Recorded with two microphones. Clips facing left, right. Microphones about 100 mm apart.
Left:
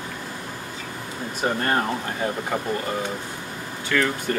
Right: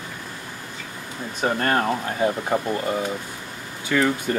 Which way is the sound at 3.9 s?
15° right (ahead or behind).